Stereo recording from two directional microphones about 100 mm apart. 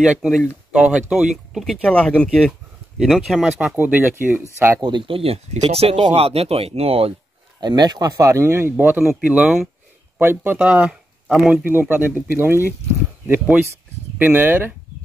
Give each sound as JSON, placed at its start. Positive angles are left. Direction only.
{"t": 0.2, "sound": "speech", "side_deg": -5}
{"t": 0.7, "sound": "speech", "side_deg": -15}
{"t": 1.5, "sound": "speech", "side_deg": 0}
{"t": 3.7, "sound": "speech", "side_deg": -20}
{"t": 4.8, "sound": "speech", "side_deg": -55}
{"t": 7.6, "sound": "speech", "side_deg": -45}
{"t": 9.2, "sound": "speech", "side_deg": -10}
{"t": 10.1, "sound": "speech", "side_deg": -20}
{"t": 14.1, "sound": "speech", "side_deg": -20}